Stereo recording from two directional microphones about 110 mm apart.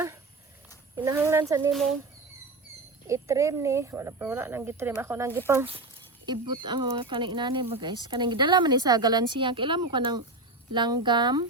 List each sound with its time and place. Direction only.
0.9 s speech: 20° right (ahead or behind)
1.7 s speech: centre (ahead or behind)
3.1 s speech: 30° right (ahead or behind)
6.2 s speech: 45° right (ahead or behind)